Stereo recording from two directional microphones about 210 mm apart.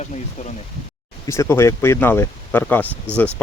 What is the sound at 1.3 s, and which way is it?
Speech, 15° left (ahead or behind).